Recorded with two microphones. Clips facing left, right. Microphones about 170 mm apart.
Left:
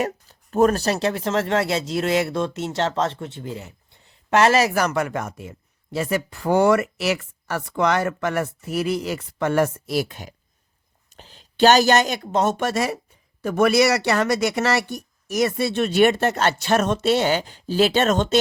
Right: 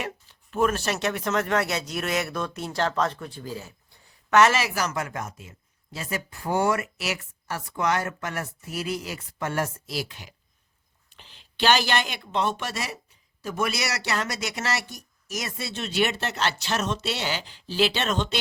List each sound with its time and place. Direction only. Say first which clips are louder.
0.0 s speech: left 9 dB; 40° left (ahead or behind)
4.7 s speech: left 7 dB; 60° left (ahead or behind)